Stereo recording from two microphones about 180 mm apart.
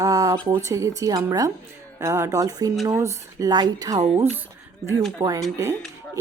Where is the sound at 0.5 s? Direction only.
15° right (ahead or behind).